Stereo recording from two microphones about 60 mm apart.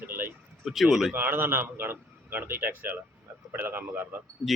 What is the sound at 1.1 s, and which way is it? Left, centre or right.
A man's voice, right.